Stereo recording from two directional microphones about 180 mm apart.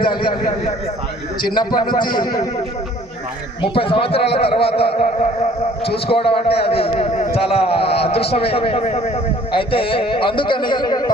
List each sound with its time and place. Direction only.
0.0 s a man's voice: 25° left (ahead or behind)
3.6 s a man's voice: 30° left (ahead or behind)
6.1 s a man's voice: 30° left (ahead or behind)